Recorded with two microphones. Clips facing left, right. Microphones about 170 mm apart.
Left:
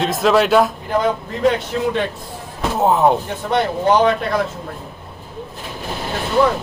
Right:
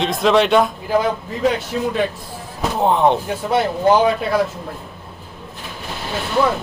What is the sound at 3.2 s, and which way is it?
Speech, 5° right (ahead or behind).